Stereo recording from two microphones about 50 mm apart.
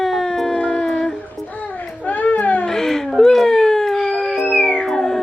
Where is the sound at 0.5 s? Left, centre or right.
Centre.